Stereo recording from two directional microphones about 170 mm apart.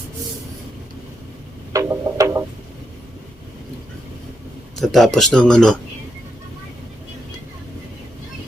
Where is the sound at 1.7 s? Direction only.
20° right (ahead or behind).